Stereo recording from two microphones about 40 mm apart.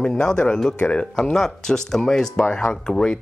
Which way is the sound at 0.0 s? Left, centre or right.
Centre.